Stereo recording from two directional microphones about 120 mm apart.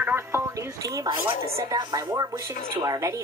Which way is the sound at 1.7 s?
30° right (ahead or behind).